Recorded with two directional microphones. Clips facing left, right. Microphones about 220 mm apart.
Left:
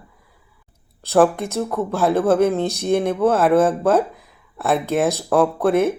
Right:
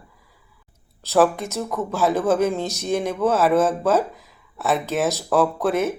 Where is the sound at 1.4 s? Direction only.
15° left (ahead or behind).